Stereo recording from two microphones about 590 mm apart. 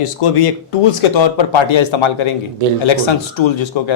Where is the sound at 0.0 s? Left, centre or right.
Left.